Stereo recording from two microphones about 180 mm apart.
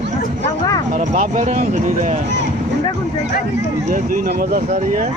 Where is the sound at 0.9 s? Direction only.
45° right (ahead or behind).